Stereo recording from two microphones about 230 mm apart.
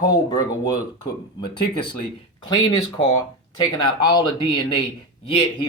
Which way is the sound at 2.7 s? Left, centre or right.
Left.